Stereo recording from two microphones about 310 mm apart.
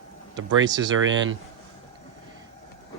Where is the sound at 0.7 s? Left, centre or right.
Centre.